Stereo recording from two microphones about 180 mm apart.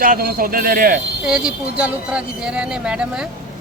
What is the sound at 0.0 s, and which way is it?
Speech, 55° right (ahead or behind).